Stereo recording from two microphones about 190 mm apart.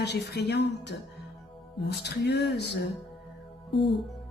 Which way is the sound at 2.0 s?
60° left (ahead or behind).